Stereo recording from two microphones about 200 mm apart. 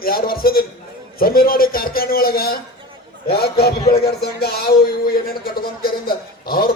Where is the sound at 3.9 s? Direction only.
50° left (ahead or behind).